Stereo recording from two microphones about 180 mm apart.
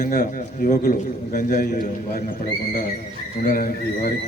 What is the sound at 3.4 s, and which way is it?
Speech, 50° left (ahead or behind).